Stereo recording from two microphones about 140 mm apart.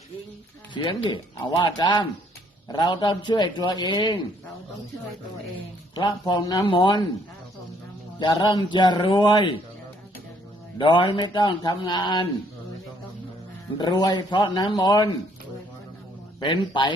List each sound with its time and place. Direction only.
0.7 s a man's voice: 35° left (ahead or behind)
5.9 s a man's voice: 35° left (ahead or behind)
8.2 s a man's voice: 35° left (ahead or behind)
10.8 s a man's voice: 35° left (ahead or behind)
13.7 s a man's voice: 30° left (ahead or behind)
16.4 s a man's voice: 35° left (ahead or behind)